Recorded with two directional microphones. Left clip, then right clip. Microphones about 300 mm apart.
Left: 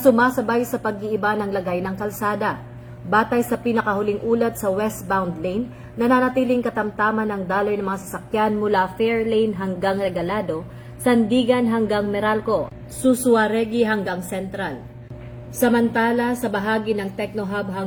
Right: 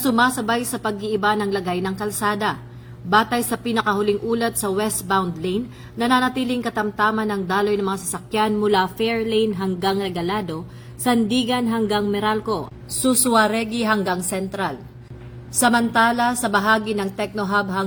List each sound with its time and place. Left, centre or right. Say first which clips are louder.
0.0 s a woman's voice: left 3 dB; right